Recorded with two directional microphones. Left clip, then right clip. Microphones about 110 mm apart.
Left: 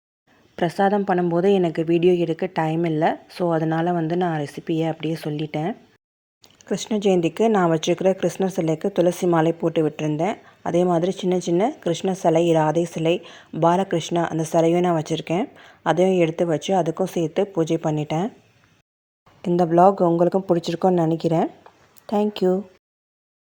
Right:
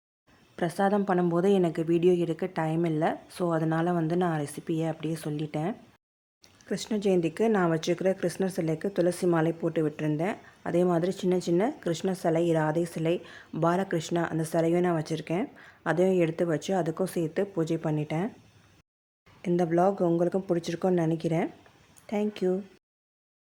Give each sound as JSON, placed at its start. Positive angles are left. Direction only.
{"t": 0.5, "sound": "speech", "side_deg": 25}
{"t": 19.5, "sound": "a woman's voice", "side_deg": 35}